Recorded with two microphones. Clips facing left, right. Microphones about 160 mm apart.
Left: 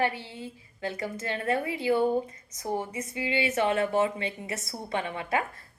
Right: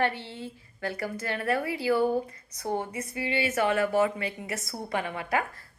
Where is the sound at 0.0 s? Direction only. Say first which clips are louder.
Even; 15° left (ahead or behind).